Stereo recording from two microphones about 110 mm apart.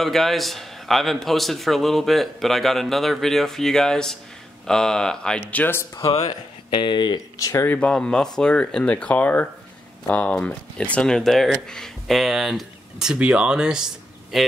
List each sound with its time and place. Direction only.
0.0 s a man's voice: centre (ahead or behind)
5.5 s speech: 15° left (ahead or behind)
6.7 s speech: 45° left (ahead or behind)
7.4 s speech: 20° left (ahead or behind)
7.9 s a man's voice: 5° left (ahead or behind)